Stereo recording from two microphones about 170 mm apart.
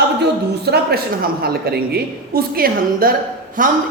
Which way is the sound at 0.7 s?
70° right (ahead or behind).